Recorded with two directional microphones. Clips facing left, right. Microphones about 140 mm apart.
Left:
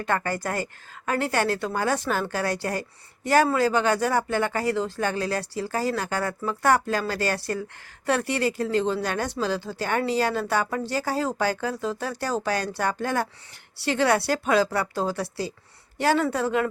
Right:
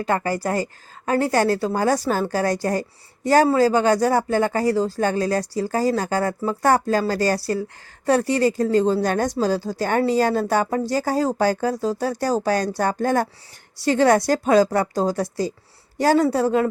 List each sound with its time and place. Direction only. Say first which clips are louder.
0.1 s a woman's voice: right 4 dB; 20° right (ahead or behind)